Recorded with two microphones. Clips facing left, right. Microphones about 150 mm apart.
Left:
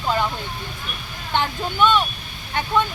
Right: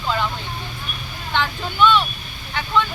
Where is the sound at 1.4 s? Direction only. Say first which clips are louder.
Even; 45° left (ahead or behind).